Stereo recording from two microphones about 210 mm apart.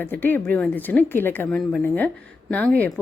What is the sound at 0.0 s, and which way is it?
Speech, 10° left (ahead or behind).